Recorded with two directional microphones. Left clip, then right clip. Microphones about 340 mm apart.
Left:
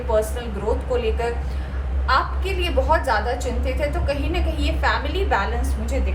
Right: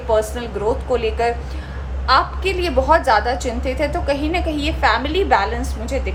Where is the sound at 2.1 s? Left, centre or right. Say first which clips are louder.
Right 5 dB; right.